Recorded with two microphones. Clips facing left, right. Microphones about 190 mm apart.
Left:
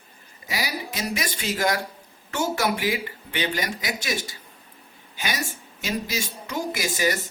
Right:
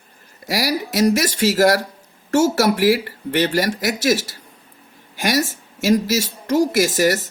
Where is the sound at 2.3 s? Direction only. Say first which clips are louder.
Right 9 dB; 90° right.